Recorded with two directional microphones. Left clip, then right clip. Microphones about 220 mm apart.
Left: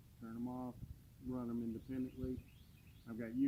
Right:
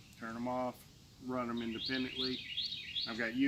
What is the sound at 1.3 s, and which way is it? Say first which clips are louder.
Speech: right 8 dB; 10° right (ahead or behind).